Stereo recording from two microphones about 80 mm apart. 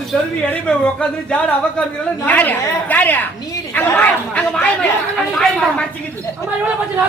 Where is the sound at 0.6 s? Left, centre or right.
Centre.